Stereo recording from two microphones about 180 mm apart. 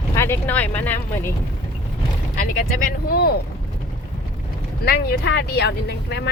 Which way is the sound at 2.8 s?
55° left (ahead or behind).